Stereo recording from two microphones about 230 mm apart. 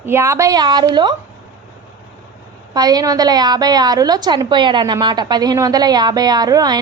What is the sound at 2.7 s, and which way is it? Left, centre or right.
A woman's voice, centre.